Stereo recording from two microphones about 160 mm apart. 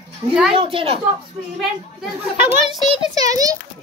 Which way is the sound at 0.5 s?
35° right (ahead or behind).